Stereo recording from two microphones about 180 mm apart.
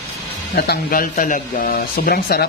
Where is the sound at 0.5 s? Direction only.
60° left (ahead or behind).